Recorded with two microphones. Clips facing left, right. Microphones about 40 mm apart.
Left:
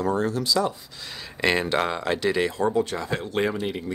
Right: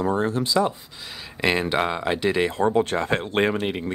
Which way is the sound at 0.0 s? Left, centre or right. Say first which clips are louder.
Right 1 dB; right.